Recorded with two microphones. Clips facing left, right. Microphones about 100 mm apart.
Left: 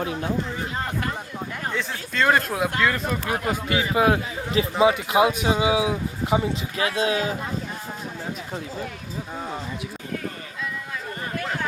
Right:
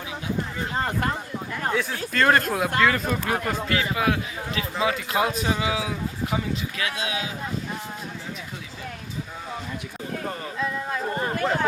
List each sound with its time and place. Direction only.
0.0 s speech: 55° left (ahead or behind)
1.7 s speech: 5° right (ahead or behind)
3.2 s speech: 15° left (ahead or behind); by 7.3 s 40° left (ahead or behind)
10.6 s a sound: 40° right (ahead or behind)